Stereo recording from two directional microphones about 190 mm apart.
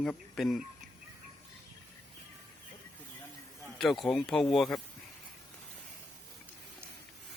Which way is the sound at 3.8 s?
Centre (ahead or behind).